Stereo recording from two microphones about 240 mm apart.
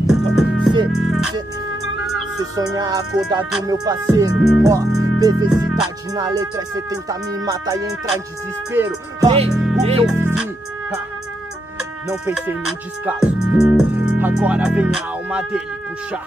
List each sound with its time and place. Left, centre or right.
0.0 s music: centre
0.9 s speech: centre
2.5 s speech: centre
4.5 s music: centre
5.5 s speech: centre
6.1 s speech: centre
9.3 s speech: right
10.0 s music: centre
12.3 s speech: centre